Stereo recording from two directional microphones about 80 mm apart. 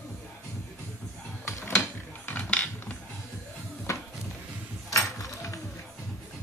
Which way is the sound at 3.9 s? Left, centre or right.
Left.